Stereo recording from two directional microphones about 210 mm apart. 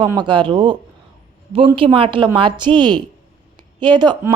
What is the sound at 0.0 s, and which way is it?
A woman's voice, 20° right (ahead or behind).